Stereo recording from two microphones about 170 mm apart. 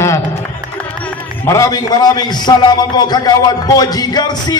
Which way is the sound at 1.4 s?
15° left (ahead or behind).